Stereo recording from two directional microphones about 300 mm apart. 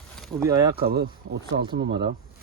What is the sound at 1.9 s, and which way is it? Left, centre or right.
Speech, centre.